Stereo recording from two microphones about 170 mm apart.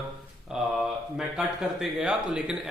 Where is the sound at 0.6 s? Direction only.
5° right (ahead or behind).